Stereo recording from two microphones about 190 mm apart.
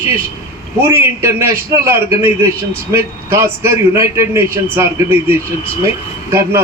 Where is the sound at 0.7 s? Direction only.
15° right (ahead or behind).